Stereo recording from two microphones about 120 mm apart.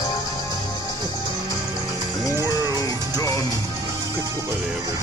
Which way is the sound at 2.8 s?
30° left (ahead or behind).